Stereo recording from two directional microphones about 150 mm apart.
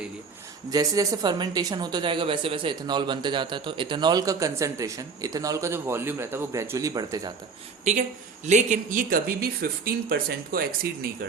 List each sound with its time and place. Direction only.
0.7 s speech: 25° right (ahead or behind)
8.4 s speech: 55° right (ahead or behind); by 10.8 s 80° right